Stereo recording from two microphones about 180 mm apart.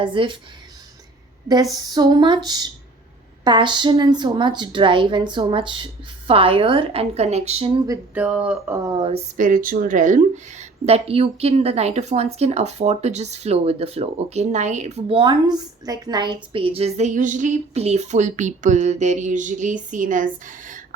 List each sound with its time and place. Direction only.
0.0 s a woman's voice: 30° right (ahead or behind)
1.7 s a woman's voice: 20° right (ahead or behind)
8.1 s a sound: 5° right (ahead or behind)
9.0 s speech: 35° right (ahead or behind)
9.4 s speech: 50° right (ahead or behind)
15.2 s a woman's voice: 25° right (ahead or behind); by 20.8 s 45° right (ahead or behind)